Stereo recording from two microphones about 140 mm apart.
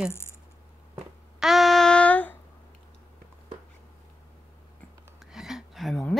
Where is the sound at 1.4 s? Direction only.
Centre (ahead or behind).